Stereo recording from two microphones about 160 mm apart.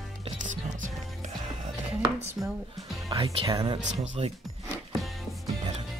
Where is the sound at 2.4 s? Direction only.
10° right (ahead or behind).